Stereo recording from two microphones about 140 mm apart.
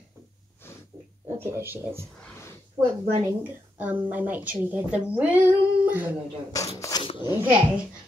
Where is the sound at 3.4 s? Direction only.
10° right (ahead or behind).